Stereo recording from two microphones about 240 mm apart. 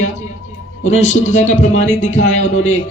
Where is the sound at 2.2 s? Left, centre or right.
Left.